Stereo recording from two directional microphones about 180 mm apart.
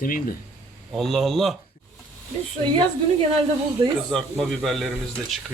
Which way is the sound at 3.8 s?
25° right (ahead or behind).